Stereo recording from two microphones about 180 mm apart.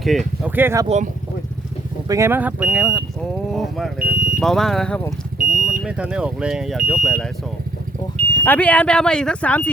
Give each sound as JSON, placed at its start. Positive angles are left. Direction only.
{"t": 0.0, "sound": "speech", "side_deg": 0}
{"t": 0.5, "sound": "speech", "side_deg": -15}
{"t": 0.9, "sound": "speech", "side_deg": -40}
{"t": 2.0, "sound": "speech", "side_deg": -15}
{"t": 4.1, "sound": "speech", "side_deg": -55}
{"t": 4.4, "sound": "speech", "side_deg": 0}
{"t": 5.4, "sound": "smoke detector", "side_deg": -45}
{"t": 5.8, "sound": "speech", "side_deg": -5}
{"t": 8.4, "sound": "speech", "side_deg": 10}